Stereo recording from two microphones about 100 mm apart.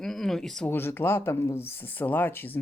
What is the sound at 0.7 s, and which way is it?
Speech, 20° left (ahead or behind).